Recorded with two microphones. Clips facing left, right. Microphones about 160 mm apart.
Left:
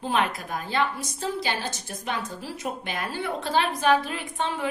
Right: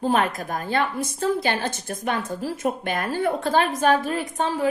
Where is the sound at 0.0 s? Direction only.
45° right (ahead or behind).